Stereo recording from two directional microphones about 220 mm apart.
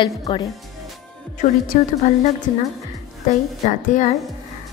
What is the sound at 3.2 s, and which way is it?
Speech, 35° left (ahead or behind).